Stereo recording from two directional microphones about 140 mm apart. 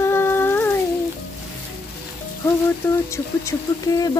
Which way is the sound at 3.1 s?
25° left (ahead or behind).